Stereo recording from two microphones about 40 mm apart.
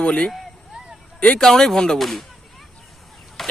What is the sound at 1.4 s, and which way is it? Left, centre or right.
Speech, centre.